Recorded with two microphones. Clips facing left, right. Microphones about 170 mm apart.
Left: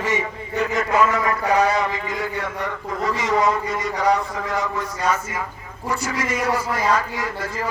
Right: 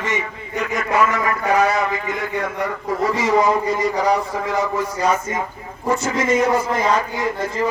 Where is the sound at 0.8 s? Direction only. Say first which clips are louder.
Right 1 dB; 30° left (ahead or behind).